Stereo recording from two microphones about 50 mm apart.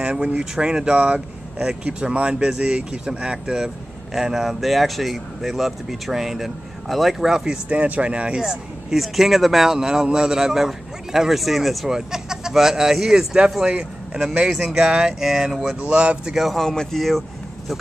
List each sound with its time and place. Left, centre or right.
0.0 s speech: right
7.7 s speech: right
8.4 s speech: centre
15.8 s speech: right
16.3 s speech: centre